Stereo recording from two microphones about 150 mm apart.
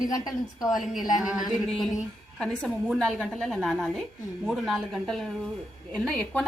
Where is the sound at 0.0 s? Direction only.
25° left (ahead or behind).